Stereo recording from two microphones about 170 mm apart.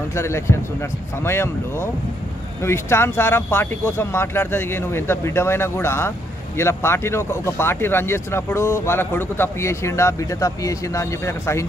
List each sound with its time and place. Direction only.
0.1 s speech: 15° left (ahead or behind)